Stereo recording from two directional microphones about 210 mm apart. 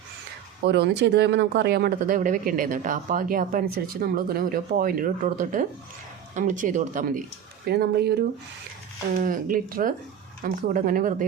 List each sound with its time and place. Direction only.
0.6 s speech: 55° right (ahead or behind)